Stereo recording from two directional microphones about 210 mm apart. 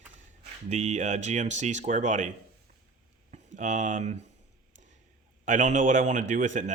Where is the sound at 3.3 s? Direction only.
35° right (ahead or behind).